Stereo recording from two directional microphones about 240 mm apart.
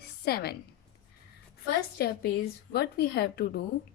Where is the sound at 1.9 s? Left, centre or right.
Left.